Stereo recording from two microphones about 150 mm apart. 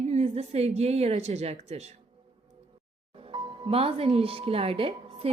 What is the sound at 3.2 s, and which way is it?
Speech, 35° right (ahead or behind).